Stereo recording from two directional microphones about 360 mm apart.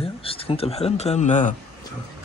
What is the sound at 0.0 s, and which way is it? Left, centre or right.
Speech, centre.